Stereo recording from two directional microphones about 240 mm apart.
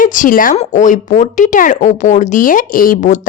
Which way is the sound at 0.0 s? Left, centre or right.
Left.